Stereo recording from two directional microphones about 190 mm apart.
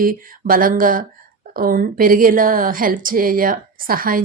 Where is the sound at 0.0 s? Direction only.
50° right (ahead or behind).